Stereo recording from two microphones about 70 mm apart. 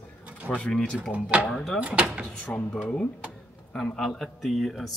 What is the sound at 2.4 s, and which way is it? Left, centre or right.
Speech, centre.